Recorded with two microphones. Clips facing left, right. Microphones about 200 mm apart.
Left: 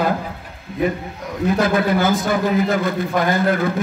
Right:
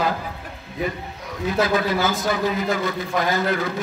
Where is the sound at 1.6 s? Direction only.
50° left (ahead or behind).